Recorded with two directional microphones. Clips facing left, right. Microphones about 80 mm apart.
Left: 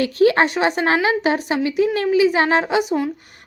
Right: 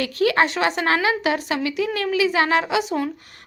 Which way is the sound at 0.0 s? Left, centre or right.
Left.